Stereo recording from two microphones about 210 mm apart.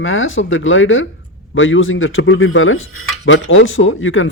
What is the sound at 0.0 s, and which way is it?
Speech, 70° left (ahead or behind).